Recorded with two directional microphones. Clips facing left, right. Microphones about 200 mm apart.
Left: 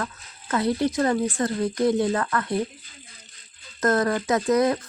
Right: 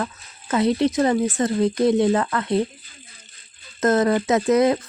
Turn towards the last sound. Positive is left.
turn(degrees=-20)  # may be behind; listen again after turning